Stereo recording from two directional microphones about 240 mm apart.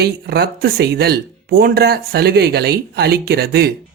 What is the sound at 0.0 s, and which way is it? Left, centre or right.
Speech, right.